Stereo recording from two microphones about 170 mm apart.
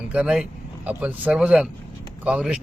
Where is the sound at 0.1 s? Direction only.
5° right (ahead or behind).